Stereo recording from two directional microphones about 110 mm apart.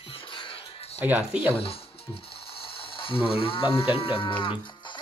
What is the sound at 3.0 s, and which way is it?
Speech, 55° left (ahead or behind).